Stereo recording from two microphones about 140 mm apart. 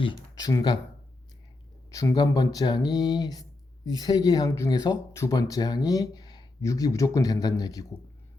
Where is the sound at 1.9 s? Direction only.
25° left (ahead or behind).